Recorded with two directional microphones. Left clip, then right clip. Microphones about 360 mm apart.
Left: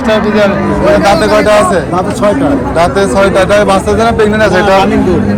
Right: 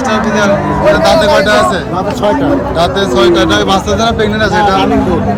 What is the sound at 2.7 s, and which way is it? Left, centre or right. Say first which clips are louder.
A man's voice: left 4 dB; centre.